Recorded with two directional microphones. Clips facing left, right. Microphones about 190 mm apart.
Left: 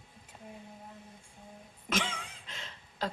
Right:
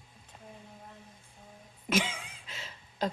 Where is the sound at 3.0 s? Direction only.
15° right (ahead or behind).